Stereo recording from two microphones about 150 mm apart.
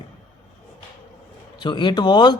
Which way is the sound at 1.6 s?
30° left (ahead or behind).